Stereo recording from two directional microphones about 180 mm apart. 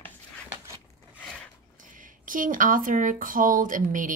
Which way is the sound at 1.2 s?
5° left (ahead or behind).